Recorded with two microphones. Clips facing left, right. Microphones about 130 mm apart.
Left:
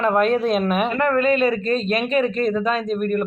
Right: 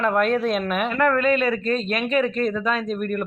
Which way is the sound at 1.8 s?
Centre (ahead or behind).